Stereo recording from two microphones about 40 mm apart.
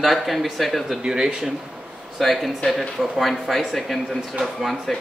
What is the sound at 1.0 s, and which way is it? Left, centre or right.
Speech, centre.